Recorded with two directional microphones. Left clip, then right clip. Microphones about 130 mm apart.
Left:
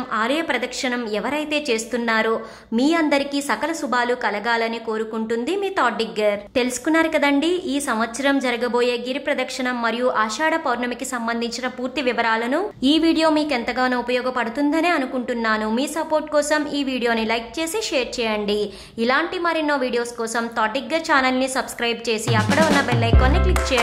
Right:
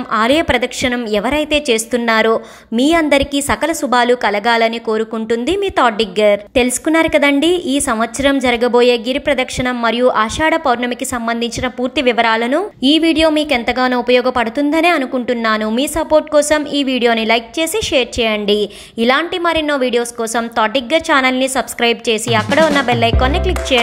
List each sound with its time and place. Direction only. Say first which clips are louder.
0.1 s a woman's voice: right 9 dB; 40° right (ahead or behind)
12.8 s a woman's voice: right 5 dB; 25° right (ahead or behind)
22.4 s music: right 4 dB; centre (ahead or behind)
22.8 s a woman's voice: right 7 dB; 35° right (ahead or behind)